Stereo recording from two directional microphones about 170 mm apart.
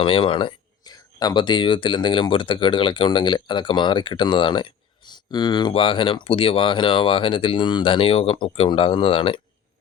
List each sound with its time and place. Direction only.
0.0 s speech: 30° left (ahead or behind)